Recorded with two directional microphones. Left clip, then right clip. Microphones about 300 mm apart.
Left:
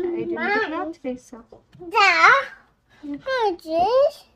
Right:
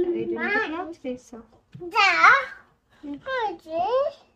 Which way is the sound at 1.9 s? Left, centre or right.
Left.